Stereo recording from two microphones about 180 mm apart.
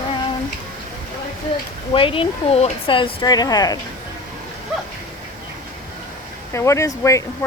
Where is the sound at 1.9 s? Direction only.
30° left (ahead or behind).